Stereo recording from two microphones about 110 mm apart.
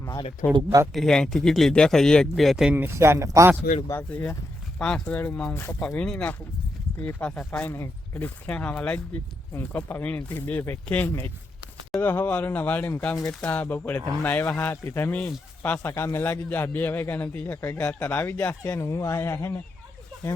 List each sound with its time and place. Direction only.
0.4 s speech: 25° left (ahead or behind)
0.9 s speech: 5° left (ahead or behind)
2.7 s speech: 20° right (ahead or behind)
4.1 s a man's voice: 15° left (ahead or behind)
5.8 s a man's voice: 5° left (ahead or behind); by 19.6 s 25° left (ahead or behind)